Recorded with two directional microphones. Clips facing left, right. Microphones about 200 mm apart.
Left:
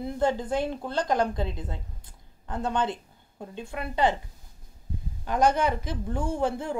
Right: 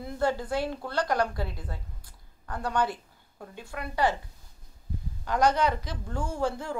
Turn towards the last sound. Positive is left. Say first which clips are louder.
# left 3 dB
turn(degrees=20)  # may be behind; listen again after turning